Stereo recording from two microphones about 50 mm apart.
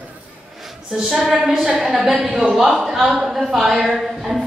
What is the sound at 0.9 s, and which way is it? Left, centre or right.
A woman's voice, centre.